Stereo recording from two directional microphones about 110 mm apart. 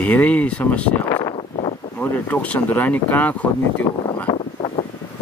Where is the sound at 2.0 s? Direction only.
15° left (ahead or behind).